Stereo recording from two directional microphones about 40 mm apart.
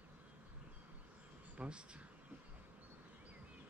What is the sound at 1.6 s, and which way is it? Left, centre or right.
Speech, right.